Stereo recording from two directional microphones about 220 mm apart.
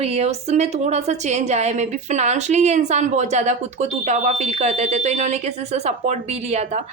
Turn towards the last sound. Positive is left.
turn(degrees=-30)  # may be behind; listen again after turning